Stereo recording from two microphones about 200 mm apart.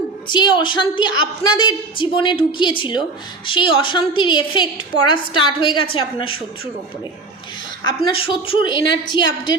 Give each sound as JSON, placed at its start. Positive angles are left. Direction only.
{"t": 0.3, "sound": "a woman's voice", "side_deg": 25}
{"t": 7.9, "sound": "a woman's voice", "side_deg": 25}